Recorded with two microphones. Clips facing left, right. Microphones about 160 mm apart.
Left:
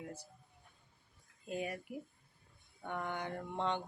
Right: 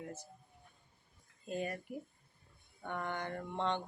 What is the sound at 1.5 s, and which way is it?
Speech, 10° left (ahead or behind).